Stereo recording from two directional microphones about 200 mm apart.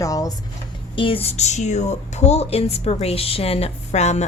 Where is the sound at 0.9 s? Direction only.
25° left (ahead or behind).